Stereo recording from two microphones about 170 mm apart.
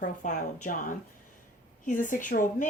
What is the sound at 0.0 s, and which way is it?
Speech, 50° left (ahead or behind).